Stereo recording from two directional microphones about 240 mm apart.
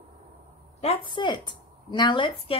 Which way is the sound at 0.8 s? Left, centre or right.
Left.